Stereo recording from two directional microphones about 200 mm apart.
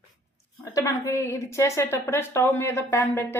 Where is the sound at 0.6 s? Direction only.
15° left (ahead or behind).